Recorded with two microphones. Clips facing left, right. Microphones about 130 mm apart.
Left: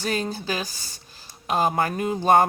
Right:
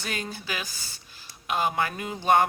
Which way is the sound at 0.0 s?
35° left (ahead or behind).